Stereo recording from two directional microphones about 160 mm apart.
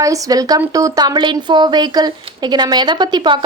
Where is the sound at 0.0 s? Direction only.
20° right (ahead or behind).